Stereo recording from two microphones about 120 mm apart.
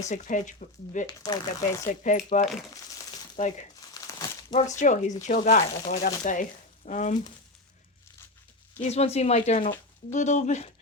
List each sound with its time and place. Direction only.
0.1 s speech: 90° left
1.2 s speech: 30° left (ahead or behind)
2.0 s speech: 85° left
4.5 s speech: 90° left
8.8 s speech: 60° left (ahead or behind)
10.1 s speech: 90° left